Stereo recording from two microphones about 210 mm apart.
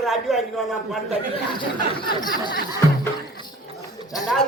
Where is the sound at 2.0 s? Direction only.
20° left (ahead or behind).